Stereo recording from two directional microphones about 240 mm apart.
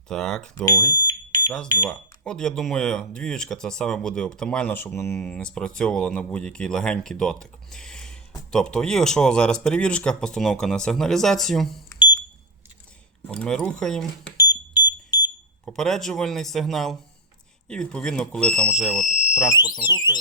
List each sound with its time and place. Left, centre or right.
0.1 s speech: centre
1.9 s speech: centre
13.2 s speech: centre
14.3 s smoke detector: centre
15.6 s speech: centre
19.5 s speech: centre